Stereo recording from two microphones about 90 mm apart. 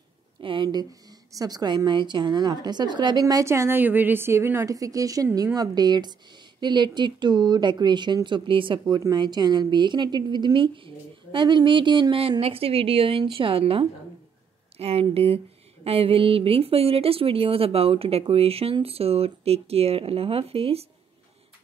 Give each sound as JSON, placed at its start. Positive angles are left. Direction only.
{"t": 0.4, "sound": "speech", "side_deg": -70}
{"t": 1.3, "sound": "a woman's voice", "side_deg": -45}
{"t": 4.6, "sound": "speech", "side_deg": -40}
{"t": 9.1, "sound": "a woman's voice", "side_deg": -50}
{"t": 13.2, "sound": "speech", "side_deg": -75}